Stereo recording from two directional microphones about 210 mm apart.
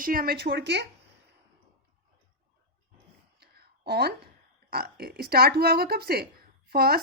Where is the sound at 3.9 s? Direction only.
50° right (ahead or behind).